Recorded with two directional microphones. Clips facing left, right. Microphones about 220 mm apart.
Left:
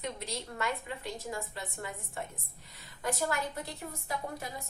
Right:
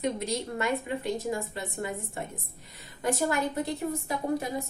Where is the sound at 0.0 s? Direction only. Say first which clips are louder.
Right 9 dB; 15° right (ahead or behind).